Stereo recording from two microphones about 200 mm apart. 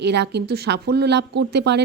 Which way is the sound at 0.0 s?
60° right (ahead or behind).